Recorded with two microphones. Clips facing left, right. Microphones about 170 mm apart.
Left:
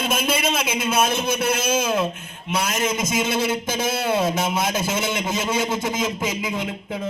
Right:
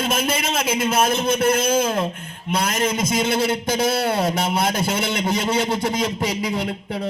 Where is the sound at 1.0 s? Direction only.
55° right (ahead or behind).